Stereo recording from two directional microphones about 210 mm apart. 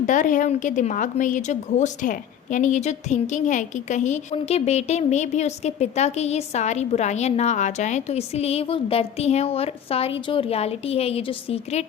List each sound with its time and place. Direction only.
0.0 s a woman's voice: 35° left (ahead or behind)